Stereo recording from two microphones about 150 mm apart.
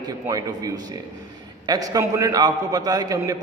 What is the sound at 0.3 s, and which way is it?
A man's voice, 25° right (ahead or behind).